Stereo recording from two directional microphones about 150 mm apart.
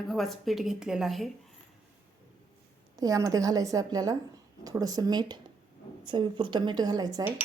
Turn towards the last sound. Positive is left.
turn(degrees=-25)  # may be behind; listen again after turning